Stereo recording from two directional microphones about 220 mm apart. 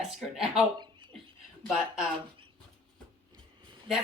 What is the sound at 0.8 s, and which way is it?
Chuckle, 20° right (ahead or behind).